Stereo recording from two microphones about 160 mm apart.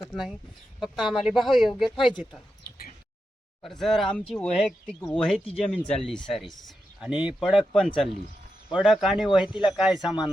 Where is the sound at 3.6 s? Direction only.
Centre (ahead or behind).